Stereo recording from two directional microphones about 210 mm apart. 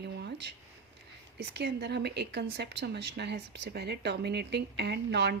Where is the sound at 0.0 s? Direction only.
55° right (ahead or behind).